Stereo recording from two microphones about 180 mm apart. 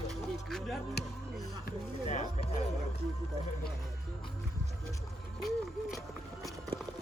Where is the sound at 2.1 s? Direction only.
40° left (ahead or behind).